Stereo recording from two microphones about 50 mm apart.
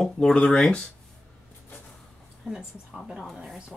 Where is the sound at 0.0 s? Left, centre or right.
Centre.